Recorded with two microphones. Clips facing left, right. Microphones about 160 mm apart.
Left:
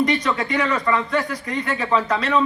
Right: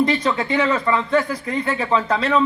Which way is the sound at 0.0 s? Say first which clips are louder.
Right 1 dB; 30° right (ahead or behind).